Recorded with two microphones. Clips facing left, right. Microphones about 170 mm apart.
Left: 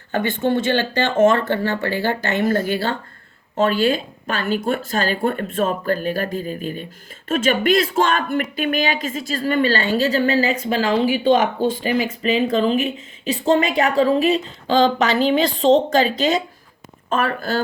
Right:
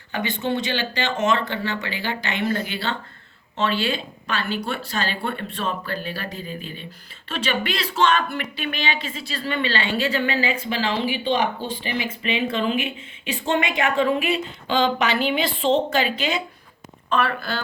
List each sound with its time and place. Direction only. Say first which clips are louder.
0.1 s speech: left 5 dB; 50° left (ahead or behind)